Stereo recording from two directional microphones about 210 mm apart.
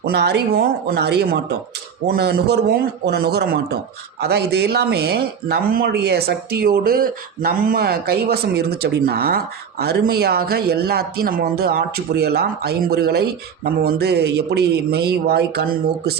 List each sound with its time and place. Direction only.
0.0 s speech: 50° right (ahead or behind)